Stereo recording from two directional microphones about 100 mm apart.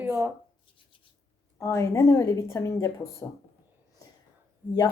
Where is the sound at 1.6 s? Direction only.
30° left (ahead or behind).